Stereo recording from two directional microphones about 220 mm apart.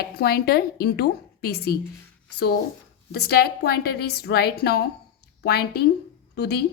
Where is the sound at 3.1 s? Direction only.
45° left (ahead or behind).